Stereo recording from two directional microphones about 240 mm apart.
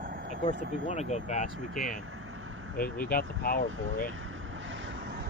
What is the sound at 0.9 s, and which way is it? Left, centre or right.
Speech, left.